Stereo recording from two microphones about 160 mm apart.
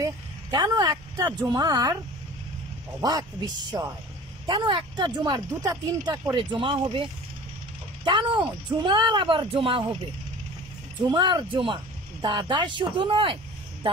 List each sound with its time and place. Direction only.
0.0 s a woman's voice: 25° right (ahead or behind)
3.0 s speech: 25° right (ahead or behind)
6.3 s speech: 30° right (ahead or behind)
11.0 s speech: 25° right (ahead or behind)